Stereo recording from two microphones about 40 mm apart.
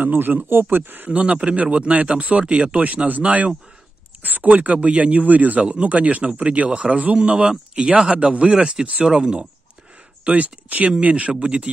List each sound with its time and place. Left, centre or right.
0.0 s speech: right
0.5 s speech: right
1.1 s speech: right
2.4 s speech: right
3.1 s speech: right
5.2 s speech: right; by 8.1 s centre
8.1 s speech: right
10.3 s speech: right